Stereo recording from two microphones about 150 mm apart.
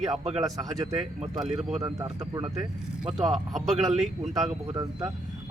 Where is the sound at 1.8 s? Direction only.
25° right (ahead or behind).